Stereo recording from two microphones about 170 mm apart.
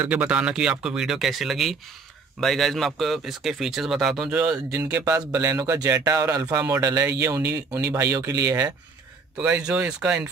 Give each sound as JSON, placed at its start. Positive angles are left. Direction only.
{"t": 0.0, "sound": "speech", "side_deg": -10}
{"t": 4.8, "sound": "speech", "side_deg": -20}
{"t": 9.4, "sound": "speech", "side_deg": -5}